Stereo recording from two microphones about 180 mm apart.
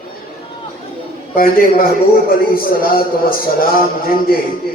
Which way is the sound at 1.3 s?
55° left (ahead or behind).